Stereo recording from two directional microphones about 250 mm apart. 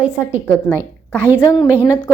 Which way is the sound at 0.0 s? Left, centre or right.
Centre.